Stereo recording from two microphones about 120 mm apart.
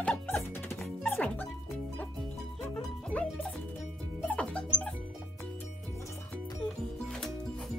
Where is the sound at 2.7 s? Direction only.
10° left (ahead or behind).